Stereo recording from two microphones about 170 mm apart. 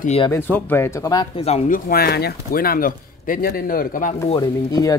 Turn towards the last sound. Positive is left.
turn(degrees=20)  # may be behind; listen again after turning